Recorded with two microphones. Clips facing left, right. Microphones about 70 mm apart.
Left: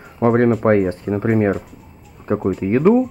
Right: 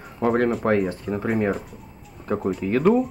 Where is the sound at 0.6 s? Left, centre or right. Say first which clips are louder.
Left 6 dB; left.